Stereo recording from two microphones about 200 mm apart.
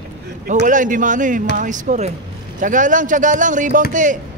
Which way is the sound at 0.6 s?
40° right (ahead or behind).